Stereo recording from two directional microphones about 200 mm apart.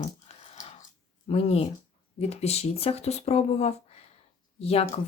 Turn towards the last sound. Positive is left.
turn(degrees=30)  # may be behind; listen again after turning